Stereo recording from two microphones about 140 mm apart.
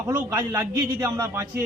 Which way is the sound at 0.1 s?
25° right (ahead or behind).